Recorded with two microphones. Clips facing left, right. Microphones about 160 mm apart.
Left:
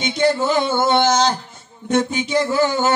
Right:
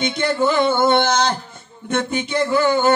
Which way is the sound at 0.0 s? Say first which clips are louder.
Left 1 dB; 55° right (ahead or behind).